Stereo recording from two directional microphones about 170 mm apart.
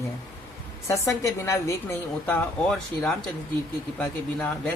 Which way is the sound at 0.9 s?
15° left (ahead or behind).